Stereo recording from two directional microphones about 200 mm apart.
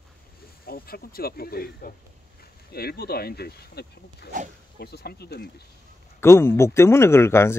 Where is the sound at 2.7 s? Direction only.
50° left (ahead or behind).